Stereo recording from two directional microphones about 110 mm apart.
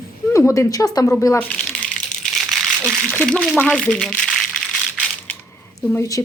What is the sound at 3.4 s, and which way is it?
Speech, 5° right (ahead or behind).